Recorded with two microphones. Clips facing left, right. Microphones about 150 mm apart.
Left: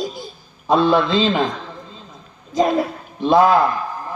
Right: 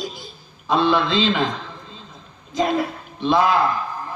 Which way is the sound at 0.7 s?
45° left (ahead or behind).